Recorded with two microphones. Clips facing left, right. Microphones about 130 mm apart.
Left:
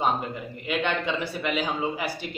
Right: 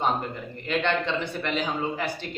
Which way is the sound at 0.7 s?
10° left (ahead or behind).